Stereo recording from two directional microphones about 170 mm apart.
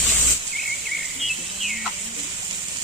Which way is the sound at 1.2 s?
Centre (ahead or behind).